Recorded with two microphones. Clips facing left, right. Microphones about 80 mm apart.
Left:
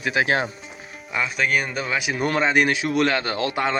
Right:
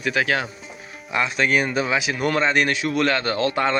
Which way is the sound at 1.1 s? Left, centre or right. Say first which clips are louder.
Right 2 dB; centre.